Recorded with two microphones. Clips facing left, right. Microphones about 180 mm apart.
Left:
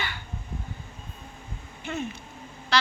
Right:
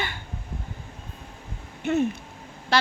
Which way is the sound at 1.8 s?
60° right (ahead or behind).